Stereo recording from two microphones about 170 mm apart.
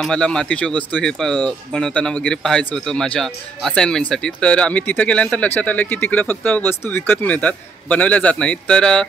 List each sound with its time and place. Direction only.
0.0 s speech: 5° left (ahead or behind)